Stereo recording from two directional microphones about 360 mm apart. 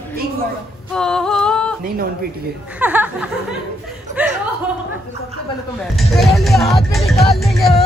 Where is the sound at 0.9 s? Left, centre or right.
Centre.